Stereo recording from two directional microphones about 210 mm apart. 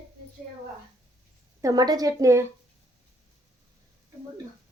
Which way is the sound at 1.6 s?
20° right (ahead or behind).